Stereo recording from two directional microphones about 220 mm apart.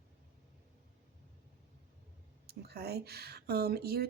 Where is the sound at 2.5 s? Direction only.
45° right (ahead or behind).